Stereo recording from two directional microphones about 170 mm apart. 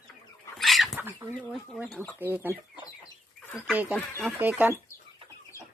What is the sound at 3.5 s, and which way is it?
Speech, centre (ahead or behind).